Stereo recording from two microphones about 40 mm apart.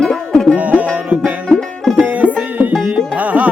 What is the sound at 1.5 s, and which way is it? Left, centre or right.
Music, centre.